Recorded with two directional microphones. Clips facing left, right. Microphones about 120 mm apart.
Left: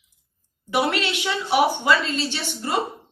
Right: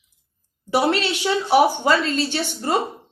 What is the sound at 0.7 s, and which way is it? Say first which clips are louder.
A woman's voice: right 3 dB; 35° right (ahead or behind).